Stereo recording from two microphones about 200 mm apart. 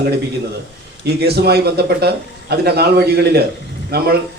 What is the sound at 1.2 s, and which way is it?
A man's voice, 55° right (ahead or behind).